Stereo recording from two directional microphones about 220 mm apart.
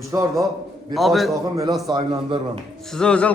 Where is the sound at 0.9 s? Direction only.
Centre (ahead or behind).